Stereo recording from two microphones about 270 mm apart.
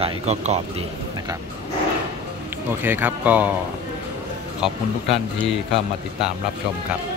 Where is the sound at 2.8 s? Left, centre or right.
Centre.